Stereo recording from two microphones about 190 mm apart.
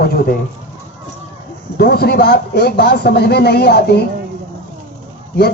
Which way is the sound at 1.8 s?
55° left (ahead or behind).